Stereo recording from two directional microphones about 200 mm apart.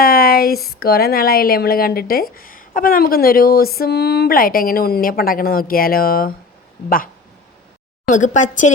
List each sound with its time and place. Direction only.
0.0 s a sound: 50° left (ahead or behind)
0.7 s speech: 50° left (ahead or behind)
8.0 s a woman's voice: 40° left (ahead or behind)